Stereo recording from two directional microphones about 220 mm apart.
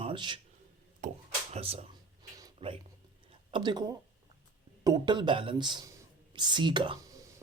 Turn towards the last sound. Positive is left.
turn(degrees=-20)  # may be behind; listen again after turning